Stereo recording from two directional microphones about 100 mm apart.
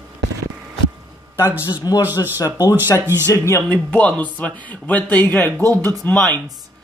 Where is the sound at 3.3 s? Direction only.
30° left (ahead or behind).